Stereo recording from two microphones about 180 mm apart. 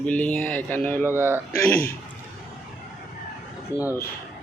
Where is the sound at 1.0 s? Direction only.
10° right (ahead or behind).